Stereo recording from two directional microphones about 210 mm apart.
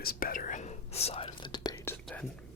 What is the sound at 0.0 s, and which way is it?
Whispering, 45° left (ahead or behind).